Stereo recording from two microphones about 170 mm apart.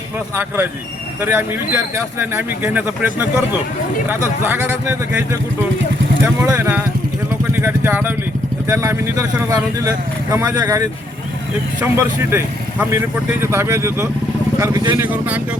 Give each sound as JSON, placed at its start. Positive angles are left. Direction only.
{"t": 0.3, "sound": "speech", "side_deg": -10}
{"t": 15.0, "sound": "speech", "side_deg": -10}